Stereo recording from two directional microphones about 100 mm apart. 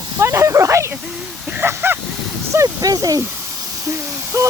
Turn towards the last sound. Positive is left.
turn(degrees=-30)  # may be behind; listen again after turning